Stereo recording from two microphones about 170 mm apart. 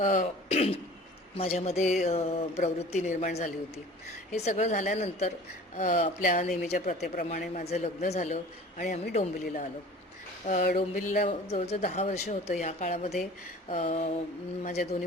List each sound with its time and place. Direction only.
0.0 s a woman's voice: 50° left (ahead or behind)
0.4 s a man's voice: 35° left (ahead or behind)